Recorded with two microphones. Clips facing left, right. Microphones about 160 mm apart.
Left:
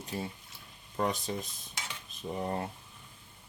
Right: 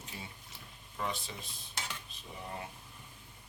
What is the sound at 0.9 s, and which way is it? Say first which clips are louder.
Speech: left 7 dB; 45° left (ahead or behind).